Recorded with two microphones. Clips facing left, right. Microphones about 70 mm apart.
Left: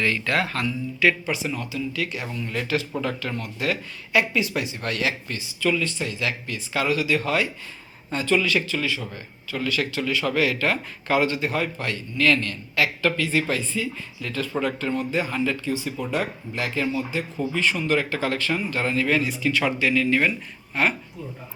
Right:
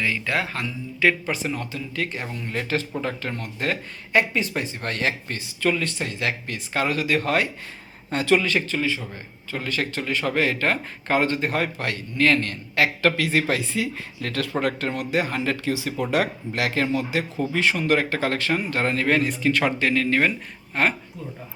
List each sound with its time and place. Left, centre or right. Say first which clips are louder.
0.0 s speech: left 1 dB; centre
1.2 s a man's voice: even; right
8.4 s speech: even; right
12.1 s a man's voice: right 1 dB; right
15.6 s speech: right 2 dB; right
17.5 s speech: right 2 dB; right